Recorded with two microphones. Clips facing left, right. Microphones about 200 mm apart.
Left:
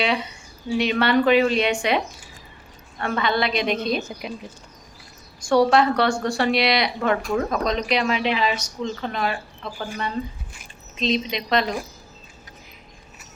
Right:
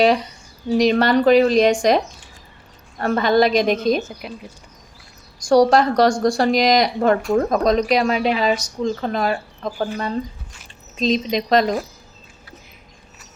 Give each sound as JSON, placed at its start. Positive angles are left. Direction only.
{"t": 0.0, "sound": "speech", "side_deg": -40}
{"t": 3.0, "sound": "a woman's voice", "side_deg": -40}
{"t": 4.1, "sound": "speech", "side_deg": 0}
{"t": 5.5, "sound": "speech", "side_deg": -40}
{"t": 11.0, "sound": "speech", "side_deg": -40}